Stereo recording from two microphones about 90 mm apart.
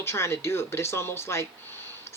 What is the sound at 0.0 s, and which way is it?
A woman's voice, 30° left (ahead or behind).